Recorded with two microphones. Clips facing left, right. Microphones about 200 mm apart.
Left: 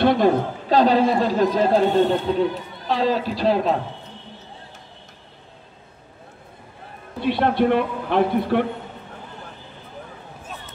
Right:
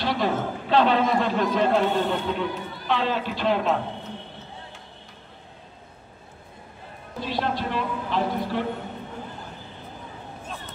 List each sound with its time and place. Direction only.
0.0 s a sound: 50° left (ahead or behind)
0.3 s a woman's voice: 40° left (ahead or behind)
7.2 s a man's voice: 60° left (ahead or behind)